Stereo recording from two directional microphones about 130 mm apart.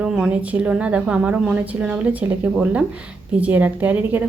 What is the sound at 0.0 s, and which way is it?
A woman's voice, 5° right (ahead or behind).